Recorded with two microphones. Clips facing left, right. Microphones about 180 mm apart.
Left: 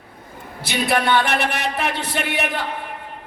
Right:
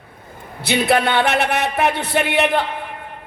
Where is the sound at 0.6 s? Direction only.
60° right (ahead or behind).